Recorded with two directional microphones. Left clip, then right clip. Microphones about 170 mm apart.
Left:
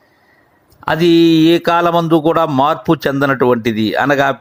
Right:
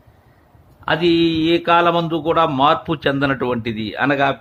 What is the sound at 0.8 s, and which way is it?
Speech, 45° left (ahead or behind).